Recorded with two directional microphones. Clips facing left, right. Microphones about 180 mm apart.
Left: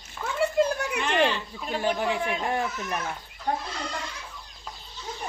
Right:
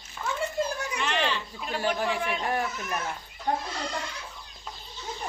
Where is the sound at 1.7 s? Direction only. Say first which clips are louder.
Left 2 dB; 20° left (ahead or behind).